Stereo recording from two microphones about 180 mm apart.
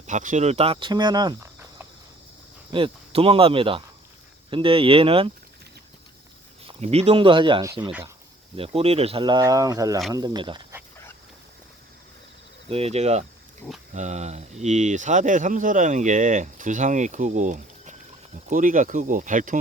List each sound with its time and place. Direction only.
0.1 s speech: 45° right (ahead or behind); by 1.9 s 15° right (ahead or behind)
2.7 s speech: 30° right (ahead or behind)
6.7 s speech: 35° right (ahead or behind)
12.7 s speech: 35° right (ahead or behind)